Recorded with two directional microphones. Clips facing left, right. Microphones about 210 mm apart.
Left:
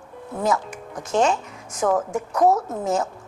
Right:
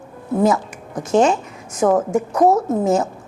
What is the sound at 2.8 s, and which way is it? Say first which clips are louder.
Speech: right 5 dB; 5° right (ahead or behind).